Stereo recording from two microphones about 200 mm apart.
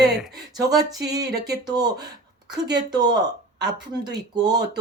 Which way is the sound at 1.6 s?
20° right (ahead or behind).